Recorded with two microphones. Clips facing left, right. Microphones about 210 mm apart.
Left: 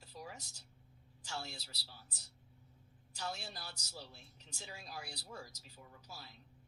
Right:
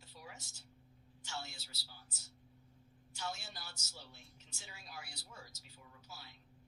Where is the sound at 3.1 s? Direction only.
35° left (ahead or behind).